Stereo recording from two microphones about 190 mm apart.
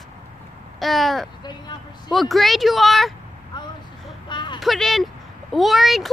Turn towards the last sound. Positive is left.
turn(degrees=0)  # may be behind; listen again after turning